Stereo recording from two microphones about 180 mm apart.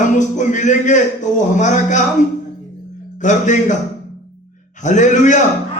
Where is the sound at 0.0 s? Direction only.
45° left (ahead or behind).